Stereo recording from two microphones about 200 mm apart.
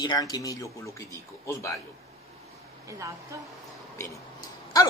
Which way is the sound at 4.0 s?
20° left (ahead or behind).